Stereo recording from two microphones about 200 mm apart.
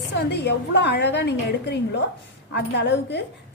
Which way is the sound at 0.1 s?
55° left (ahead or behind).